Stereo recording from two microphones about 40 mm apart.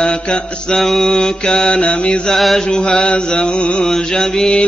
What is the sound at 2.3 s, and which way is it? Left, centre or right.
Mantra, centre.